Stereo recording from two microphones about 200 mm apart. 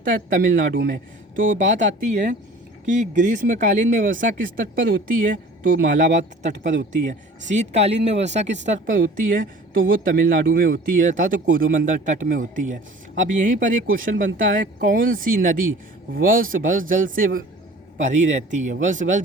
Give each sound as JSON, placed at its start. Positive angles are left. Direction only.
{"t": 0.0, "sound": "speech", "side_deg": -40}